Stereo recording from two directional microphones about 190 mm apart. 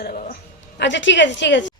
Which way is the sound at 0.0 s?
50° left (ahead or behind).